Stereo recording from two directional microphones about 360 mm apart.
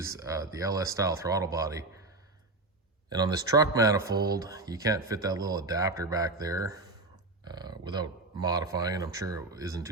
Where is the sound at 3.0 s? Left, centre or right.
Centre.